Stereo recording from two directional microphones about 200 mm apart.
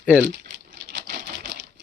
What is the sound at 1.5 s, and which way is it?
Typewriter, 60° right (ahead or behind).